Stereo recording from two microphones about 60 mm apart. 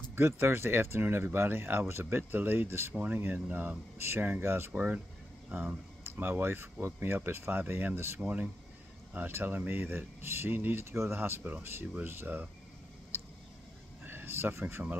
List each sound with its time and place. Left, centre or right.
0.1 s speech: right
4.7 s speech: right
8.2 s speech: right
14.0 s a sound: right